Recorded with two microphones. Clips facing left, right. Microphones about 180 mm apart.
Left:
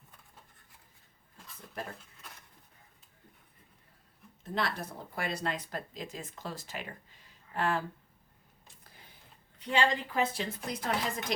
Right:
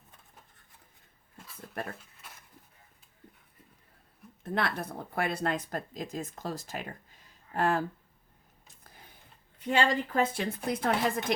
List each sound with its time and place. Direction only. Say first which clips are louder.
4.4 s speech: right 3 dB; 55° right (ahead or behind)
9.6 s speech: right 2 dB; 50° right (ahead or behind)